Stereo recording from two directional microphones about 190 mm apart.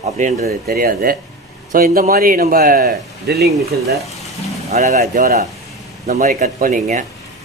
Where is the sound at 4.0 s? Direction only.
Centre (ahead or behind).